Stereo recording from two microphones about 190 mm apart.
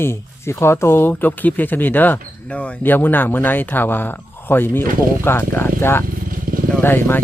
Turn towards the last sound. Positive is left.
turn(degrees=10)  # may be behind; listen again after turning